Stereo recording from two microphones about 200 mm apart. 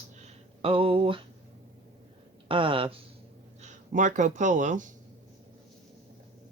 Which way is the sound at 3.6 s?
40° right (ahead or behind).